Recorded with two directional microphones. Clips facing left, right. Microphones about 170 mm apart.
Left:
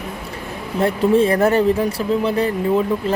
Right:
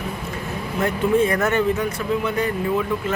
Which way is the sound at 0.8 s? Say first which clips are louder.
Left 4 dB; 30° left (ahead or behind).